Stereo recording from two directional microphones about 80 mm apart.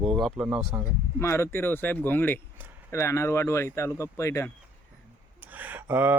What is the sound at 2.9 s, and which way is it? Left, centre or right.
Speech, left.